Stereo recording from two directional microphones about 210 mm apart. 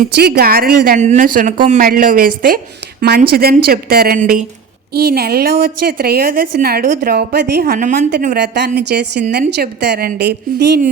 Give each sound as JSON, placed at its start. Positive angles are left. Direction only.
{"t": 0.1, "sound": "a woman's voice", "side_deg": -50}